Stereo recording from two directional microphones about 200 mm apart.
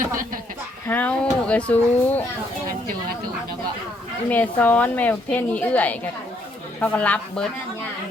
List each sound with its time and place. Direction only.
0.9 s a woman's voice: 10° left (ahead or behind)
4.3 s a woman's voice: 10° left (ahead or behind)